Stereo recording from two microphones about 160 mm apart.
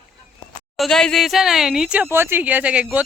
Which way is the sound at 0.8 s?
5° left (ahead or behind).